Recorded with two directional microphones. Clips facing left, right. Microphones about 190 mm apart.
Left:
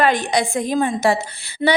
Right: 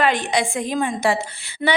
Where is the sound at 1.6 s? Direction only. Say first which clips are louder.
Left 3 dB; 25° left (ahead or behind).